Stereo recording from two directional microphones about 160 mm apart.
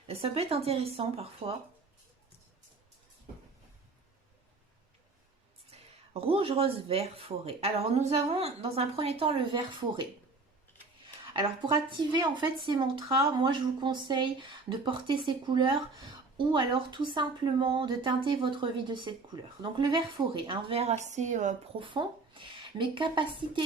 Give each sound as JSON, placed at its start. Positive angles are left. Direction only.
{"t": 0.1, "sound": "speech", "side_deg": -40}
{"t": 5.7, "sound": "speech", "side_deg": -35}
{"t": 11.0, "sound": "a woman's voice", "side_deg": -30}
{"t": 21.8, "sound": "speech", "side_deg": -30}